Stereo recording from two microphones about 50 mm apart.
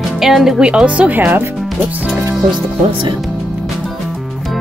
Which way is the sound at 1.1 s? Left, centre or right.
Right.